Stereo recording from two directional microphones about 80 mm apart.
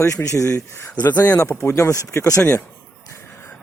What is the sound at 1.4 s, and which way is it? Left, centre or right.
Speech, left.